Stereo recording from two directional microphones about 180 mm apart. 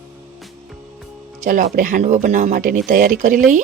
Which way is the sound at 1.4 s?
45° right (ahead or behind).